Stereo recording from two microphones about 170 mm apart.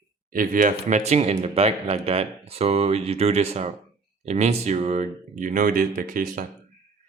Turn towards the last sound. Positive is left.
turn(degrees=-55)  # may be behind; listen again after turning